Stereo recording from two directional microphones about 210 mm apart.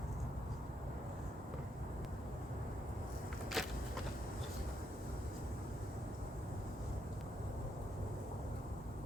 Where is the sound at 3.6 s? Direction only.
Centre (ahead or behind).